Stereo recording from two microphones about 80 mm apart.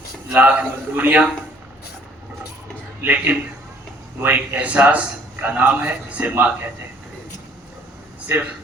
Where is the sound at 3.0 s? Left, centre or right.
Right.